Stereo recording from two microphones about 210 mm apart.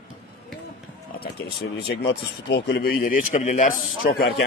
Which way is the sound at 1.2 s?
50° left (ahead or behind).